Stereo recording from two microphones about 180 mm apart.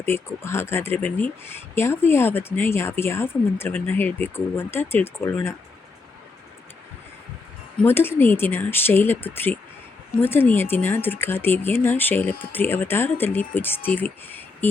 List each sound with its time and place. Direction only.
0.0 s speech: 15° left (ahead or behind)
7.8 s speech: 10° left (ahead or behind)